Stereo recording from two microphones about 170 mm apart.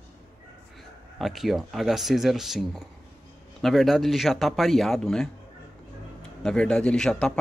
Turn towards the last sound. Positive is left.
turn(degrees=5)  # may be behind; listen again after turning